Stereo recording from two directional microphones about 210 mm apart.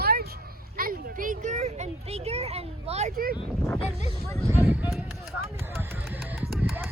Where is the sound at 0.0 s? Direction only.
45° right (ahead or behind); by 3.1 s 30° right (ahead or behind).